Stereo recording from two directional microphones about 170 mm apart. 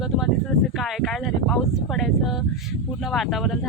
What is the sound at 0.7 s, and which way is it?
Speech, centre (ahead or behind).